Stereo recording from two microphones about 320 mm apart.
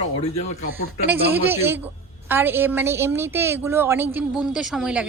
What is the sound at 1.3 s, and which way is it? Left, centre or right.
A woman's voice, centre.